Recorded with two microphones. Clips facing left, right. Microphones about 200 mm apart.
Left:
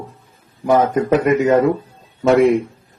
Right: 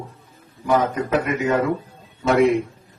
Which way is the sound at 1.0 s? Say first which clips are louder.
Left 7 dB; 50° left (ahead or behind).